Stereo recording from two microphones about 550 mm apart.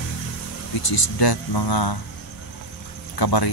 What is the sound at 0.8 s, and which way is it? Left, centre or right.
Speech, left.